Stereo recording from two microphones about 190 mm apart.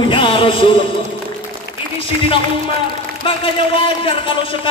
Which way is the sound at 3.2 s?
25° left (ahead or behind).